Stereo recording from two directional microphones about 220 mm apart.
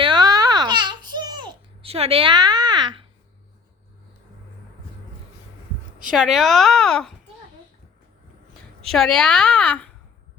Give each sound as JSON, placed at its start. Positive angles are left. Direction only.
{"t": 0.0, "sound": "babbling", "side_deg": -20}
{"t": 6.1, "sound": "a woman's voice", "side_deg": 0}
{"t": 8.9, "sound": "a woman's voice", "side_deg": 0}